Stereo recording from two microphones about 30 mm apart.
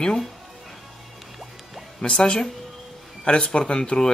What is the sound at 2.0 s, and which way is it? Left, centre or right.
Speech, left.